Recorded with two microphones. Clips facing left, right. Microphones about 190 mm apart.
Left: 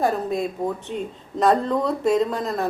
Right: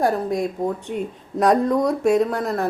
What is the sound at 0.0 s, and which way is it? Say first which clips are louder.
Speech: right 2 dB; 15° right (ahead or behind).